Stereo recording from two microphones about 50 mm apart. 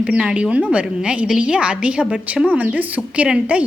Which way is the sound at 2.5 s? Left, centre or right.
Right.